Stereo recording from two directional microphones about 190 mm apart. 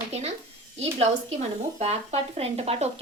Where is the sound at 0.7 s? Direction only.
35° right (ahead or behind).